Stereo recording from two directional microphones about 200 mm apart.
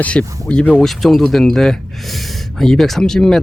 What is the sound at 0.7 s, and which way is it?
Speech, centre (ahead or behind).